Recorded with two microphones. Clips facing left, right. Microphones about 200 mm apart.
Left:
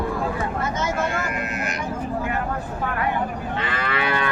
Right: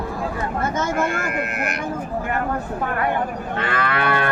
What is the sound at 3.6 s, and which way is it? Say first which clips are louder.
Moo: right 4 dB; 50° right (ahead or behind).